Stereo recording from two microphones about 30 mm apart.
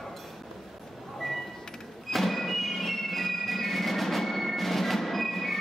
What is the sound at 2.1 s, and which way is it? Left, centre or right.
Music, centre.